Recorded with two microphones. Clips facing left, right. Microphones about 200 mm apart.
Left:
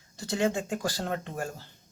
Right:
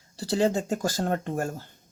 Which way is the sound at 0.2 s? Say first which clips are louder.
Right 4 dB; 35° right (ahead or behind).